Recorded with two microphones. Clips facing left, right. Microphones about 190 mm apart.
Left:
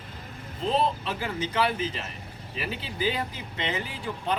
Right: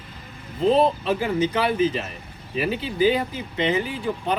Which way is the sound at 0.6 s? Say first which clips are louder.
Right 8 dB; 50° right (ahead or behind).